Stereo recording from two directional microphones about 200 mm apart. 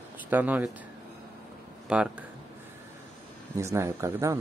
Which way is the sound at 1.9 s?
5° right (ahead or behind).